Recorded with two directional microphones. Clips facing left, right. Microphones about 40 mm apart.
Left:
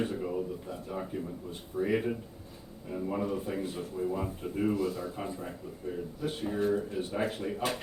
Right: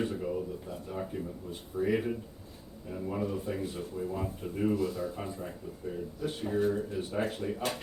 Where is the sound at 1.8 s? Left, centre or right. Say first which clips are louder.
Even; centre.